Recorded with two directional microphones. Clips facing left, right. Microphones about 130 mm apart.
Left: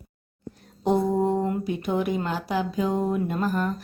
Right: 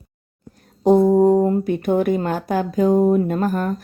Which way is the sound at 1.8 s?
50° right (ahead or behind).